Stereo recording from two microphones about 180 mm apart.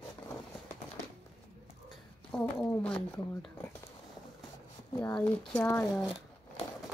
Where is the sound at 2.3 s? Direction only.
5° left (ahead or behind).